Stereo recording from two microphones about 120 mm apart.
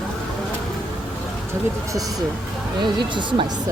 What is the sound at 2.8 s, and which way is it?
Speech, 40° right (ahead or behind).